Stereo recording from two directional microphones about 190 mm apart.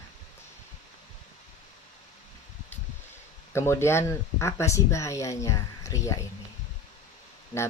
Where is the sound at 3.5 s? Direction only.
15° left (ahead or behind).